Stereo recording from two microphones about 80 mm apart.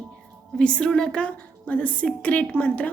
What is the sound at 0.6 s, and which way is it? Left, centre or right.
A woman's voice, centre.